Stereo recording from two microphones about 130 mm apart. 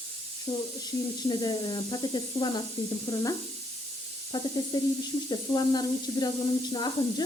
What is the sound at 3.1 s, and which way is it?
Sizzle, 25° left (ahead or behind).